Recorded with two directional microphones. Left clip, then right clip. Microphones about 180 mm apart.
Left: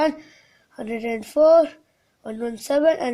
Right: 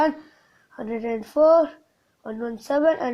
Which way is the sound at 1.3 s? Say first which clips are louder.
Left 2 dB; 5° left (ahead or behind).